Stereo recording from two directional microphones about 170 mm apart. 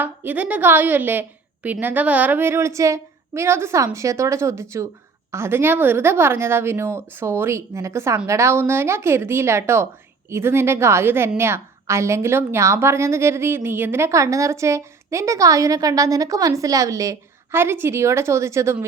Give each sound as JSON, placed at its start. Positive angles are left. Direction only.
{"t": 0.0, "sound": "a woman's voice", "side_deg": -10}